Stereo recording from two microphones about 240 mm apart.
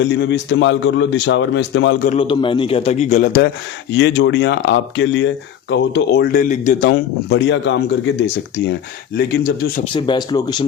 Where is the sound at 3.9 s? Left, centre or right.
Left.